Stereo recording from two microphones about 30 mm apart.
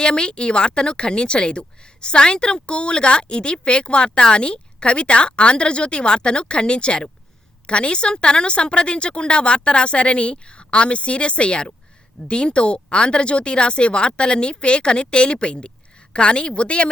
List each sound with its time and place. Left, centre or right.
0.0 s speech: left